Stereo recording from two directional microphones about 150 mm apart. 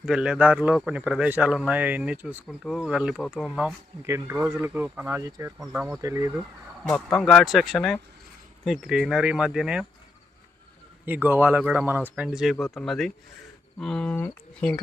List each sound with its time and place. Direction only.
0.0 s speech: 5° right (ahead or behind)
4.0 s speech: 20° right (ahead or behind)
4.4 s speech: 5° right (ahead or behind)
6.0 s speech: 20° right (ahead or behind)
6.8 s speech: 5° left (ahead or behind)
11.0 s speech: 10° right (ahead or behind); by 14.8 s 10° left (ahead or behind)